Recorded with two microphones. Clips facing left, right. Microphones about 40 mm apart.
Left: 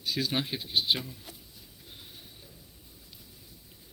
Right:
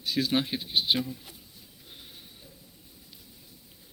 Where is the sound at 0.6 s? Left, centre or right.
Centre.